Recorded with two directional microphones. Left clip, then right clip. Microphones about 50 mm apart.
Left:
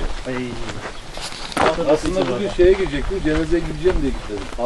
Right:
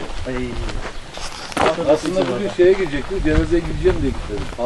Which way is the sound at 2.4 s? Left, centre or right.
Left.